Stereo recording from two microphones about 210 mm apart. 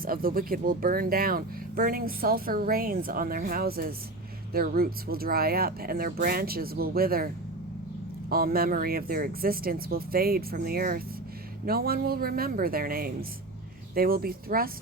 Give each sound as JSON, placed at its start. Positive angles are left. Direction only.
{"t": 0.0, "sound": "speech", "side_deg": -45}
{"t": 8.3, "sound": "speech", "side_deg": -45}